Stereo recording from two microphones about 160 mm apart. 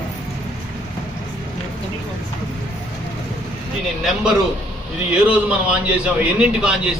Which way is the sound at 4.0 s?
5° right (ahead or behind).